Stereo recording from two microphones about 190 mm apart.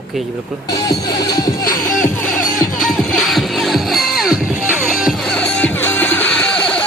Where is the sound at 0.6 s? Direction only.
20° left (ahead or behind).